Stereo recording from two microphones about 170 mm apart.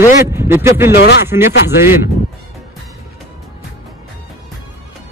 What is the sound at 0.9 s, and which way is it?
Speech, 90° left.